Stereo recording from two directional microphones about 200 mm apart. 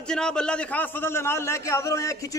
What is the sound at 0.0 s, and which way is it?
A man's voice, 5° left (ahead or behind).